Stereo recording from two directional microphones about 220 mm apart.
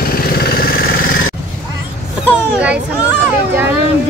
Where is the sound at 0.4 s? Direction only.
45° left (ahead or behind).